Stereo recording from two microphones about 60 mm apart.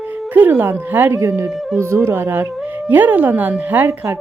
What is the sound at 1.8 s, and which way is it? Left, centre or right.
Speech, right.